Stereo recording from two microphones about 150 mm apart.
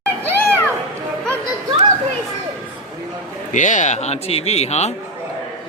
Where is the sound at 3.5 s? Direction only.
55° left (ahead or behind).